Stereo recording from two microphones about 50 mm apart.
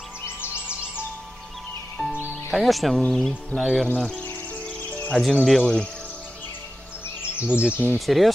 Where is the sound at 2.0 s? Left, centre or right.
Centre.